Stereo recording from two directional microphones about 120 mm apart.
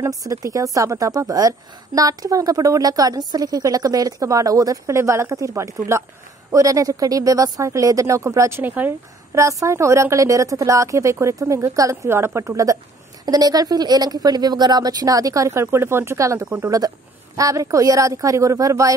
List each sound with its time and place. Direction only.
0.2 s a woman's voice: 30° right (ahead or behind)